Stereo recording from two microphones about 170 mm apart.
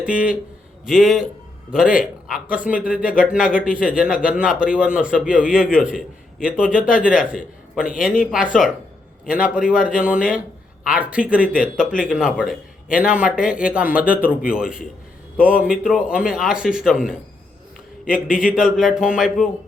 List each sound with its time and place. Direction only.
0.1 s a man's voice: 55° left (ahead or behind)
0.9 s a man's voice: centre (ahead or behind)
11.5 s speech: 55° left (ahead or behind)
12.0 s a man's voice: 5° right (ahead or behind)